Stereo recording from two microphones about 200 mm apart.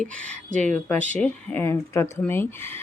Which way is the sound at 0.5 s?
40° right (ahead or behind).